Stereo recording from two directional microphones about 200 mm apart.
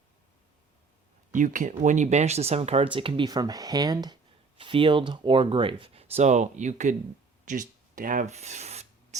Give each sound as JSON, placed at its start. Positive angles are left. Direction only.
{"t": 1.3, "sound": "speech", "side_deg": -40}